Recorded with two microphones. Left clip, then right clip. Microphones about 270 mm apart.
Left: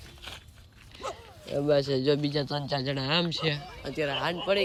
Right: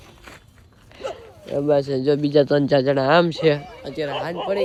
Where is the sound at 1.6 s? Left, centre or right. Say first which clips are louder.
Right 6 dB; centre.